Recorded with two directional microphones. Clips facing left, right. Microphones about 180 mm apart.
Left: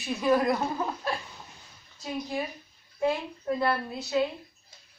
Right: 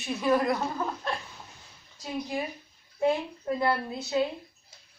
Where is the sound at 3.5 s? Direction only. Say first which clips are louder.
Right 1 dB; 15° right (ahead or behind).